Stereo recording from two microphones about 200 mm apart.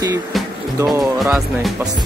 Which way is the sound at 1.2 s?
Centre (ahead or behind).